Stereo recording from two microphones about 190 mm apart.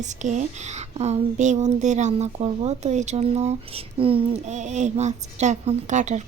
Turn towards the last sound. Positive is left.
turn(degrees=-40)  # may be behind; listen again after turning